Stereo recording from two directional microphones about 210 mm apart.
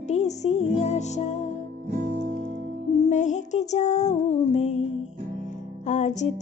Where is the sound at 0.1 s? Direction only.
30° left (ahead or behind).